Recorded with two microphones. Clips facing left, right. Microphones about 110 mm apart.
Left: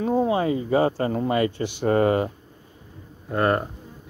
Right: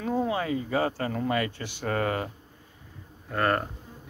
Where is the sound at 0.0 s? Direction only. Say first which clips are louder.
Left 6 dB; 25° left (ahead or behind).